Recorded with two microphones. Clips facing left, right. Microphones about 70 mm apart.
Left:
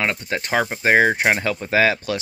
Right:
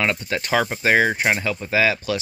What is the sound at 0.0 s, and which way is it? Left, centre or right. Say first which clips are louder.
Speech: right 1 dB; left.